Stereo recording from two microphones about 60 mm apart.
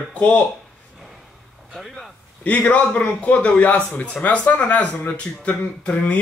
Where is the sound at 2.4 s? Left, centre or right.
Left.